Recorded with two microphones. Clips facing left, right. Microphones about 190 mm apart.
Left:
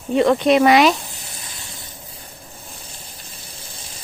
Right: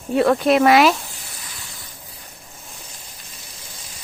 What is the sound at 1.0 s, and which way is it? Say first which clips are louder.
Sizzle: left 2 dB; 25° left (ahead or behind).